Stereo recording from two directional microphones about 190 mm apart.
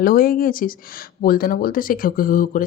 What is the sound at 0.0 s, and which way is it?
Speech, 50° left (ahead or behind).